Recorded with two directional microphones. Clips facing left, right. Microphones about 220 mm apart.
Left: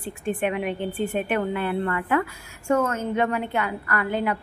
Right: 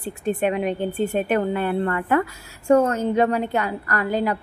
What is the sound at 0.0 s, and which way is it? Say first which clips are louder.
A woman's voice: right 3 dB; 40° right (ahead or behind).